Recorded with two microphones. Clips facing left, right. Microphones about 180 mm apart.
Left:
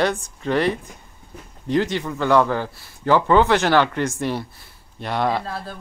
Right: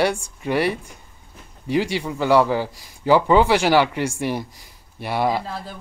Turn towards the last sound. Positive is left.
turn(degrees=-10)  # may be behind; listen again after turning